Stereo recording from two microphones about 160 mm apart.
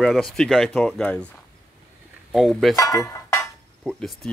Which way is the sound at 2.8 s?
20° left (ahead or behind).